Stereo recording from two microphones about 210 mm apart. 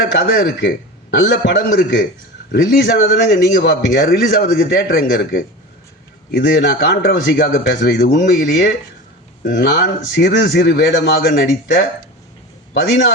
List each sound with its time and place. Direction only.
0.0 s a man's voice: 55° left (ahead or behind)